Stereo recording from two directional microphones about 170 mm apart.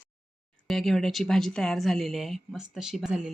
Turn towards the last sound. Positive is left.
turn(degrees=-5)  # may be behind; listen again after turning